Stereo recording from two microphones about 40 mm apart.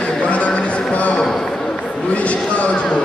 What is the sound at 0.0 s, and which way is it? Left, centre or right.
Music, left.